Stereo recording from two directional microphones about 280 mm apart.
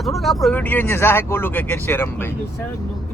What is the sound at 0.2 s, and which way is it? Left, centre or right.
Speech, centre.